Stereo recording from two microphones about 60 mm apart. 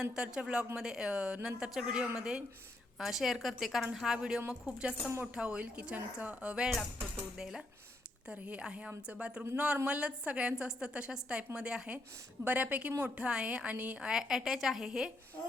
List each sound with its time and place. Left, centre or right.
0.0 s a woman's voice: centre
4.4 s a woman's voice: centre